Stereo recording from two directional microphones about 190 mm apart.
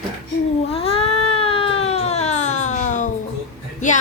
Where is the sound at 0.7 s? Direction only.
30° left (ahead or behind).